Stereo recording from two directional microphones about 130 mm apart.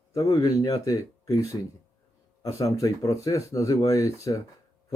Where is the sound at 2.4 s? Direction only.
25° left (ahead or behind).